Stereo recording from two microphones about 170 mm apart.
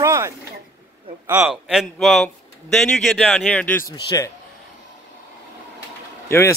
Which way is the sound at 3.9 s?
25° left (ahead or behind).